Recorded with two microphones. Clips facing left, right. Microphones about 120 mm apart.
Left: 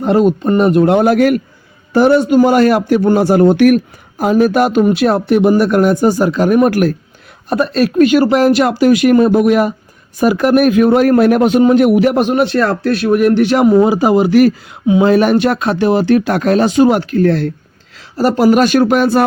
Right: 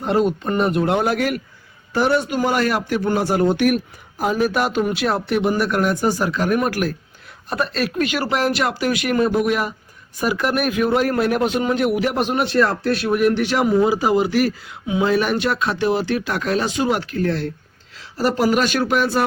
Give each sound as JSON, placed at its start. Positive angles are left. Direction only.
{"t": 0.0, "sound": "a man's voice", "side_deg": 50}
{"t": 6.7, "sound": "a man's voice", "side_deg": 50}
{"t": 12.5, "sound": "speech", "side_deg": 70}
{"t": 18.4, "sound": "a man's voice", "side_deg": 50}